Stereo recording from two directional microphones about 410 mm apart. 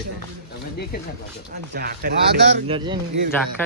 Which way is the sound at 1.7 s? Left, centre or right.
Right.